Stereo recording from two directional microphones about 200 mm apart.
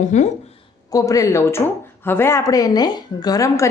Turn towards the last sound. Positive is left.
turn(degrees=15)  # may be behind; listen again after turning